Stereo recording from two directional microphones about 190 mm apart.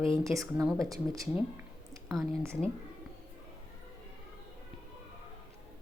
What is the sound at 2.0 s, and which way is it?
Speech, centre (ahead or behind).